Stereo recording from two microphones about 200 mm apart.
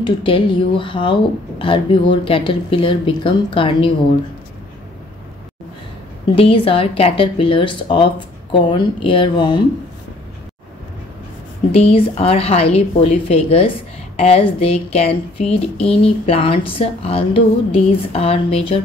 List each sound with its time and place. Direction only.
0.0 s speech: 25° left (ahead or behind)
6.3 s speech: 25° left (ahead or behind)
11.7 s speech: 30° left (ahead or behind)